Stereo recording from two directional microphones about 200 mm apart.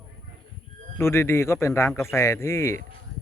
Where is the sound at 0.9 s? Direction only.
10° left (ahead or behind).